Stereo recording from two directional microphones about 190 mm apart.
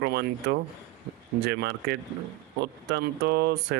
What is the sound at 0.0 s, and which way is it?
Speech, 60° right (ahead or behind).